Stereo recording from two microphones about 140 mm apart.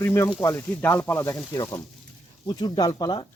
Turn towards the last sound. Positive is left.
turn(degrees=35)  # may be behind; listen again after turning